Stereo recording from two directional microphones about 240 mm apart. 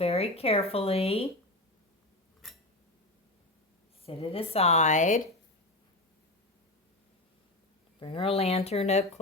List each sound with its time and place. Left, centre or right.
0.0 s speech: left
2.4 s a sound: centre
4.0 s speech: left
7.9 s speech: left